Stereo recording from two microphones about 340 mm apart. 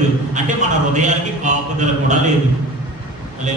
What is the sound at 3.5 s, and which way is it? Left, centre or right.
Speech, right.